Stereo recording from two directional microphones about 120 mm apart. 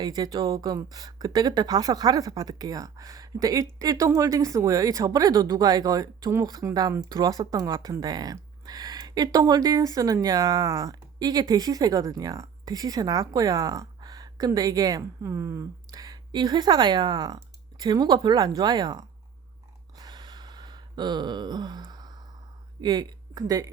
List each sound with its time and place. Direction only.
0.0 s speech: 35° right (ahead or behind)
20.0 s gasp: 35° right (ahead or behind)
22.8 s speech: 35° right (ahead or behind)